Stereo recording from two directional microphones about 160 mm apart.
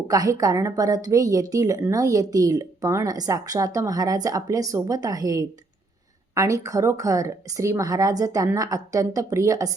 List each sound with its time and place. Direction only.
0.1 s speech: 20° right (ahead or behind)